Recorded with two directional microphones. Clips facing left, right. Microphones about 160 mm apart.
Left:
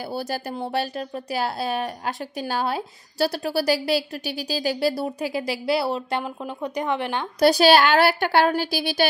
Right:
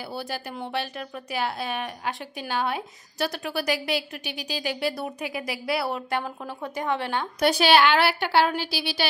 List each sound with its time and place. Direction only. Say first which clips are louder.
0.0 s speech: left 4 dB; 40° left (ahead or behind); by 7.2 s 20° left (ahead or behind)
7.3 s a woman's voice: left 4 dB; 35° left (ahead or behind)